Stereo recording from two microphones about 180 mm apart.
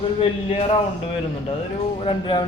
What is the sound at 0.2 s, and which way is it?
Speech, 30° left (ahead or behind).